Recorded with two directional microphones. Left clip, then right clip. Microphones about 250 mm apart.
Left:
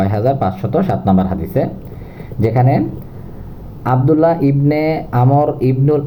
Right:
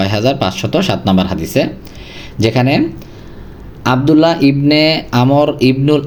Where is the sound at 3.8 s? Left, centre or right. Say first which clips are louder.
Right 2 dB; right.